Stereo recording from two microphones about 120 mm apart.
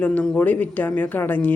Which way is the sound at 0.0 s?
10° left (ahead or behind).